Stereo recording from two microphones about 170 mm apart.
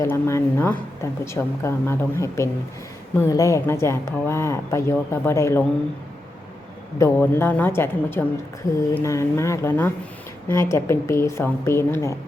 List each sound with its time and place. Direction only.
0.0 s speech: 15° left (ahead or behind)
7.0 s speech: 15° left (ahead or behind)